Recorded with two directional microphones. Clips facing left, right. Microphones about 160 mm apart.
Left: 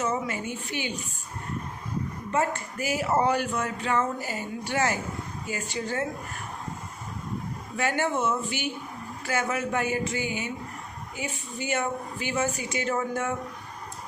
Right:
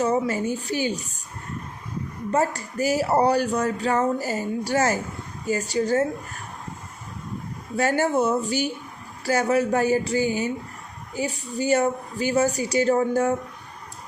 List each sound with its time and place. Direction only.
0.0 s speech: 35° right (ahead or behind)
2.3 s speech: 35° right (ahead or behind)
7.8 s speech: 40° right (ahead or behind)